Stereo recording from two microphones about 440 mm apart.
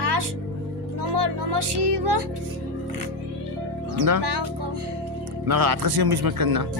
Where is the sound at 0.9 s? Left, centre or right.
Right.